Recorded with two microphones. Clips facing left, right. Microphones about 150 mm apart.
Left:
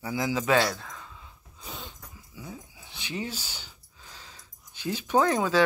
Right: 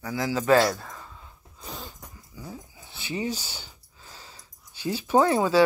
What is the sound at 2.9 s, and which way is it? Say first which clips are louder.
Speech: right 4 dB; 10° right (ahead or behind).